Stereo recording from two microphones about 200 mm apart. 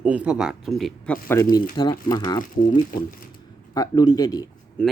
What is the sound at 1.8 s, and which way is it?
Speech, 20° left (ahead or behind).